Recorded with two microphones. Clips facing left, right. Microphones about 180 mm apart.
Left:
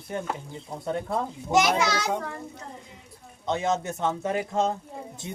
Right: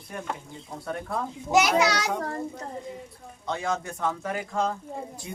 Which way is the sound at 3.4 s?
20° left (ahead or behind).